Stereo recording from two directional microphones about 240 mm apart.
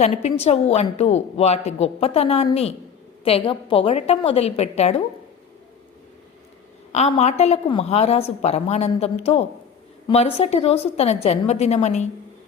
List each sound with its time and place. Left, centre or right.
0.0 s a woman's voice: left
6.9 s a woman's voice: left